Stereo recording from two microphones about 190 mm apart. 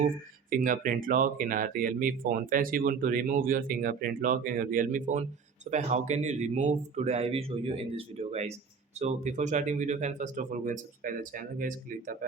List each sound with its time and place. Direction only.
0.5 s speech: 45° right (ahead or behind)